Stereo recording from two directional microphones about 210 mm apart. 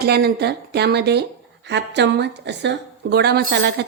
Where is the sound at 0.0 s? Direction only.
50° right (ahead or behind).